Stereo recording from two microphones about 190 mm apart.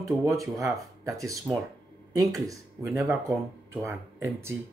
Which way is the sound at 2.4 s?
15° right (ahead or behind).